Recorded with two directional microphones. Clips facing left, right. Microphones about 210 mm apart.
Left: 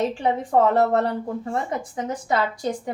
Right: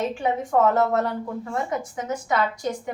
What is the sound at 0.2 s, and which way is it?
Speech, 30° left (ahead or behind).